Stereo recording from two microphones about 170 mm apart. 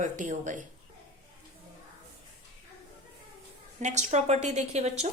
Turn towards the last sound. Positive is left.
turn(degrees=-40)  # may be behind; listen again after turning